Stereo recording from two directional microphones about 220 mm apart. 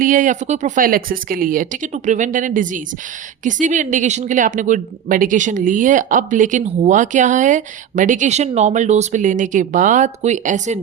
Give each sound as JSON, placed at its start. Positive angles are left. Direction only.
{"t": 0.0, "sound": "speech", "side_deg": -35}